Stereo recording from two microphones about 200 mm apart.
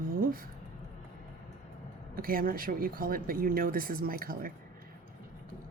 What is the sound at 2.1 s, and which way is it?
Speech, 45° right (ahead or behind).